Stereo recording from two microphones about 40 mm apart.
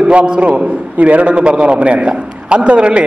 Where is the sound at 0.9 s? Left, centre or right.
Right.